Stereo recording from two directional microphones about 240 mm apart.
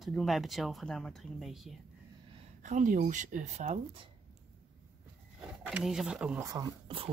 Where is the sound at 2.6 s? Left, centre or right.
Right.